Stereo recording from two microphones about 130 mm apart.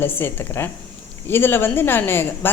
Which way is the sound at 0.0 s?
15° left (ahead or behind).